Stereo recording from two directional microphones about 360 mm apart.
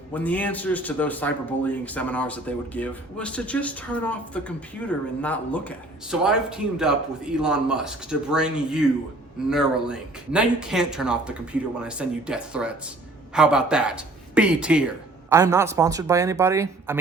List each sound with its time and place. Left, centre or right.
0.1 s a man's voice: centre